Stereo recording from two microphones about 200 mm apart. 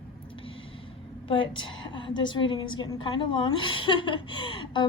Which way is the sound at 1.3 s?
25° left (ahead or behind).